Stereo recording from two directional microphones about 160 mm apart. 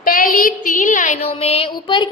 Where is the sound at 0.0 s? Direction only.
60° left (ahead or behind).